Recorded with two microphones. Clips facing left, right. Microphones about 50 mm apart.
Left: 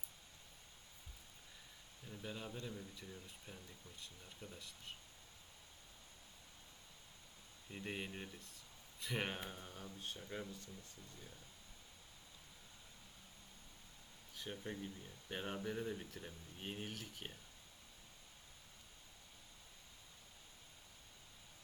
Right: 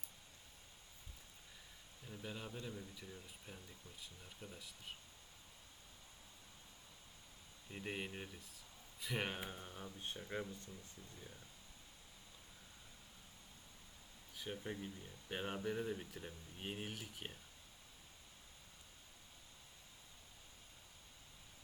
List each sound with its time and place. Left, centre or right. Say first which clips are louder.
2.0 s speech: even; centre
7.7 s speech: right 1 dB; centre
14.3 s speech: right 1 dB; centre